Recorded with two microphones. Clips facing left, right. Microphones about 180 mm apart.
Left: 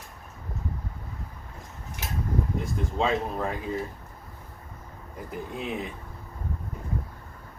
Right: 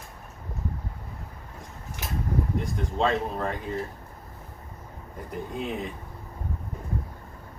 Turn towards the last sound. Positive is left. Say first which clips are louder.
# right 1 dB
turn(degrees=0)  # may be behind; listen again after turning